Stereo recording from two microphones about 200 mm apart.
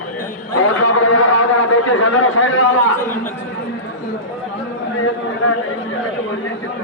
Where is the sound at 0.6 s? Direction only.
80° left.